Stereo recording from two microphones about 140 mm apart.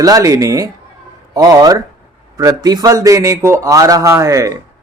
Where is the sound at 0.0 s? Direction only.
25° right (ahead or behind).